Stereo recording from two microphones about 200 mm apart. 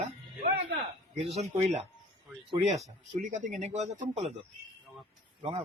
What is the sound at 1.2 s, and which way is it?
Speech, 30° right (ahead or behind).